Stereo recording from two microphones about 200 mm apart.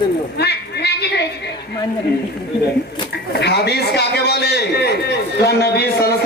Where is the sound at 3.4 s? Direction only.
55° left (ahead or behind).